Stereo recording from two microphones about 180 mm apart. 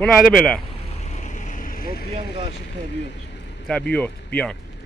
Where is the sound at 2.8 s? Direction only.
75° left (ahead or behind).